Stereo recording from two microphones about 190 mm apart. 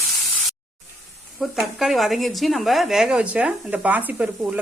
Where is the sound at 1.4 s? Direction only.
Centre (ahead or behind).